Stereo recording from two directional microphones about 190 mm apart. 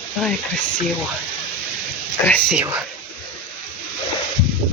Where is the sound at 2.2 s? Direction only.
10° left (ahead or behind).